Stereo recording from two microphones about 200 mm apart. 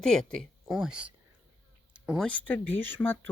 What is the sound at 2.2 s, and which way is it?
Speech, 5° left (ahead or behind).